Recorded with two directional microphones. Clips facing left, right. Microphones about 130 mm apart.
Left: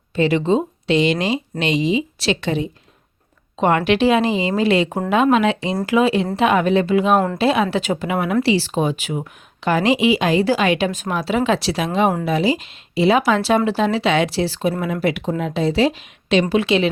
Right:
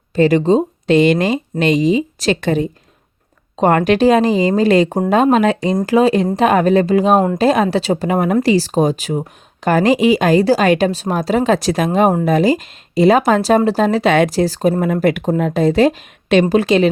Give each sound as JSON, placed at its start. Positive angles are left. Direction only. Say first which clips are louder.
{"t": 0.2, "sound": "speech", "louder": "right 5 dB", "side_deg": -40}